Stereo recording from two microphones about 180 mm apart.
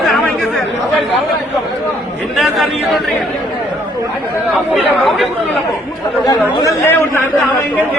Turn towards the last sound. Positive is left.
turn(degrees=15)  # may be behind; listen again after turning